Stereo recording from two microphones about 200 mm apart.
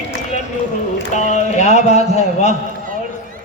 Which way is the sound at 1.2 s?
35° left (ahead or behind).